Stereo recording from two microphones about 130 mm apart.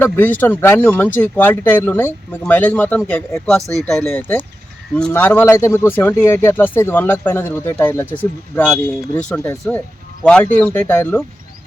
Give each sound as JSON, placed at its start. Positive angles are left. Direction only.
{"t": 0.0, "sound": "speech", "side_deg": 15}